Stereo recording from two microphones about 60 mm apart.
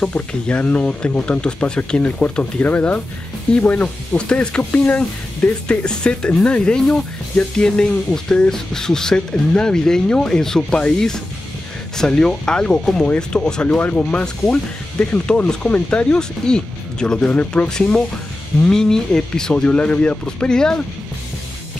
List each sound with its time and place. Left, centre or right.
0.3 s speech: left
12.0 s speech: centre
13.7 s speech: left